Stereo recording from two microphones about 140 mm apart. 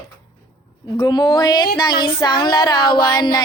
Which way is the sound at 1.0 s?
35° left (ahead or behind).